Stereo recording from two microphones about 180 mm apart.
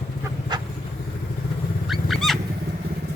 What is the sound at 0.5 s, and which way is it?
Vehicle, 25° right (ahead or behind).